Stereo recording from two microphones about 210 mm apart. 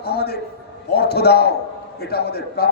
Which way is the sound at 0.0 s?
50° left (ahead or behind).